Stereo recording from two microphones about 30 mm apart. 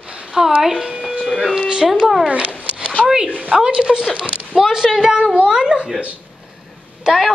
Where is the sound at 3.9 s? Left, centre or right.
Centre.